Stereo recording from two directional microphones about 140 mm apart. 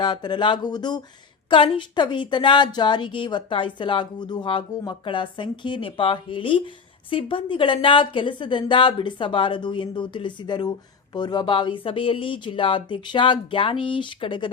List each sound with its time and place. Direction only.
0.0 s a woman's voice: 30° left (ahead or behind)